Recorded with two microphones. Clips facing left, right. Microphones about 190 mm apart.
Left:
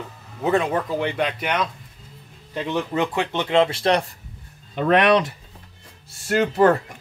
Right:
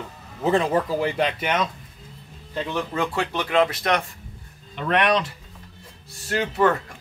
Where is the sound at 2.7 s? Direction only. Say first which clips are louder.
Left 3 dB; 20° left (ahead or behind).